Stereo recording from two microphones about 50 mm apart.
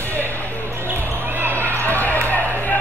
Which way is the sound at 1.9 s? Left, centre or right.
Left.